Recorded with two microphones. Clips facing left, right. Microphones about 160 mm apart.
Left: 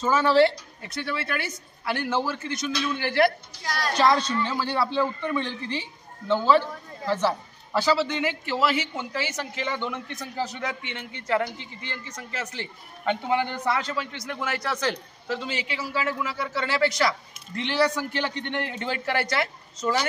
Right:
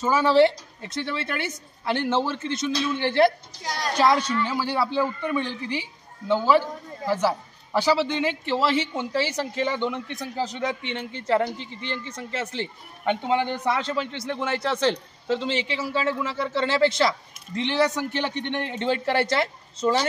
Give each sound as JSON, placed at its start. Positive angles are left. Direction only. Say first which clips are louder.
{"t": 0.0, "sound": "a man's voice", "louder": "right 1 dB", "side_deg": -15}